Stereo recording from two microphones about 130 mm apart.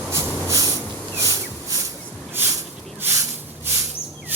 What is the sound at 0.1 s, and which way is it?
Snort, 20° right (ahead or behind).